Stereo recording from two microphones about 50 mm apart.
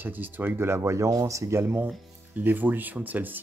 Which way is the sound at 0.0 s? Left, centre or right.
Right.